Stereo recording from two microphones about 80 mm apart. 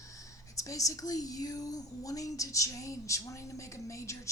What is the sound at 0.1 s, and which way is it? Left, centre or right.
A woman's voice, left.